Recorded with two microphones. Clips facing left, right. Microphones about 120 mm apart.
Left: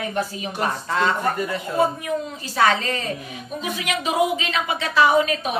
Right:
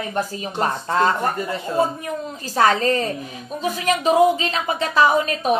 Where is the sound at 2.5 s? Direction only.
40° right (ahead or behind).